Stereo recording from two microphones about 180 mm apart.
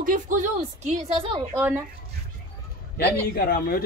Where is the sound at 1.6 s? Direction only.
10° right (ahead or behind).